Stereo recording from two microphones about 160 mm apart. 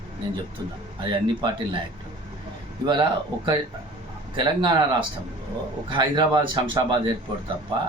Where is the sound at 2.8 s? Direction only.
25° right (ahead or behind).